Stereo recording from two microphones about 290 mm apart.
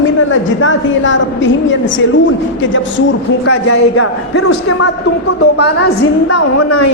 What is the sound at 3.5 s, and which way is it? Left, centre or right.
Speech, left.